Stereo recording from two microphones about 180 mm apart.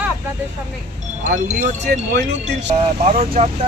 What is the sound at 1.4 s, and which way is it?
Speech, 50° right (ahead or behind).